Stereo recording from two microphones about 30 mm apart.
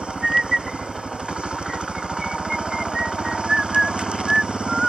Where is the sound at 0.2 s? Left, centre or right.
Right.